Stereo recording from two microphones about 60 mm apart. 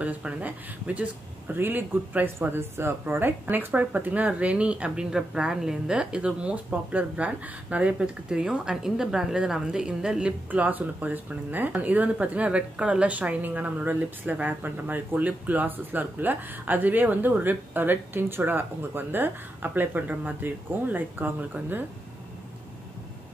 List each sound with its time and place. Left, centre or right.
0.0 s speech: right
10.5 s speech: right